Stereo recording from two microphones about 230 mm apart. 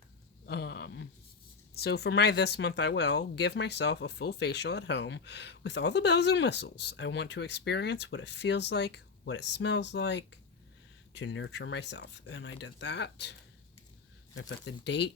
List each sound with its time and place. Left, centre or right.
0.4 s a sound: left
1.7 s speech: left
14.3 s speech: left